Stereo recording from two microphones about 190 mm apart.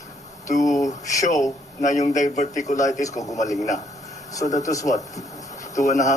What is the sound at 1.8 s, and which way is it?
Speech, 40° left (ahead or behind).